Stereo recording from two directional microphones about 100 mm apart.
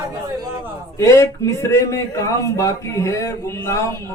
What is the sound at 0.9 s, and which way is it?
Speech, 30° left (ahead or behind).